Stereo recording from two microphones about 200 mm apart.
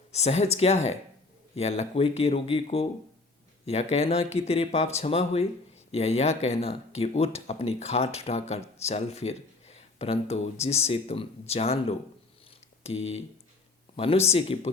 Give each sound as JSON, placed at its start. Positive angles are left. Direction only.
{"t": 0.1, "sound": "speech", "side_deg": 30}